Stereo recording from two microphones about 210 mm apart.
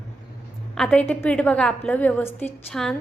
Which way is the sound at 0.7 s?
5° left (ahead or behind).